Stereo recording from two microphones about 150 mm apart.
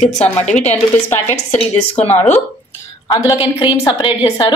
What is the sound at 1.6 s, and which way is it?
Speech, 45° left (ahead or behind).